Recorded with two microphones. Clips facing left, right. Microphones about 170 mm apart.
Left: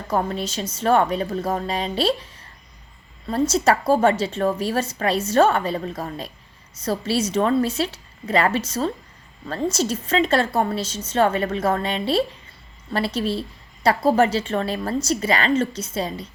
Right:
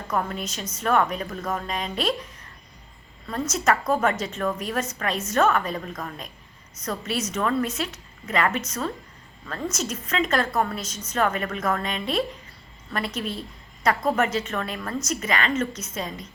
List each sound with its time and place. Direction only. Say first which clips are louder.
0.1 s a woman's voice: left 4 dB; 30° left (ahead or behind)